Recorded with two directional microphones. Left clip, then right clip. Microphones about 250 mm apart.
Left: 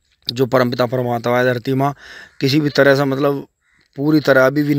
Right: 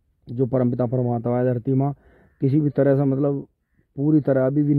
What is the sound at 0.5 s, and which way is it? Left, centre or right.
Speech, centre.